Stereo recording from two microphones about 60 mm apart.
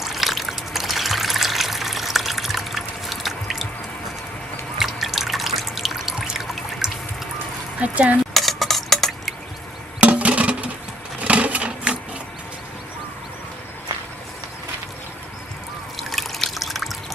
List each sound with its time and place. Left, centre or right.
0.0 s water: centre
4.8 s music: centre
7.8 s speech: right
8.3 s a sound: centre
10.0 s a sound: right
11.2 s sewing machine: right
16.0 s water: centre